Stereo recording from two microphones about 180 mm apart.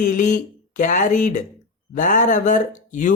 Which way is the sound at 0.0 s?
45° left (ahead or behind).